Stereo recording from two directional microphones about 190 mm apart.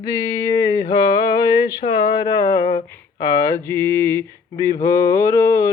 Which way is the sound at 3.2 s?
15° left (ahead or behind).